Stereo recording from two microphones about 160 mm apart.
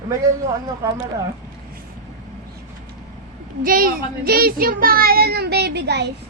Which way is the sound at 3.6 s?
65° right (ahead or behind).